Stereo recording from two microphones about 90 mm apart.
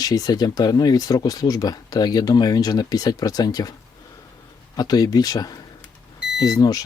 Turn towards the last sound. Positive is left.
turn(degrees=45)  # may be behind; listen again after turning